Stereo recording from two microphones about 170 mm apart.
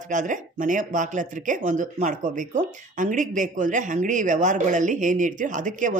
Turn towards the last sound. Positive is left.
turn(degrees=-50)  # may be behind; listen again after turning